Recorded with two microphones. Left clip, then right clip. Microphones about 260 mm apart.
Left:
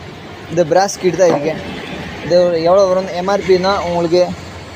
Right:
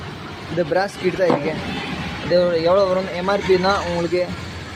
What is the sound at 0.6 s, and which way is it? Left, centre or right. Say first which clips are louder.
Speech: left 7 dB; centre.